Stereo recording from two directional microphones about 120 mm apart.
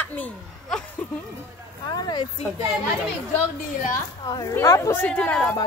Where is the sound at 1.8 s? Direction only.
35° left (ahead or behind).